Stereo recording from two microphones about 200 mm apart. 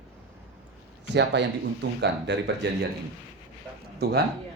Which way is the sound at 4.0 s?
55° right (ahead or behind).